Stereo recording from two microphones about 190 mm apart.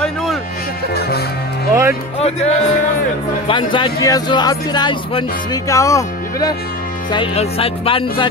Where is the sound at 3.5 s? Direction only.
25° left (ahead or behind).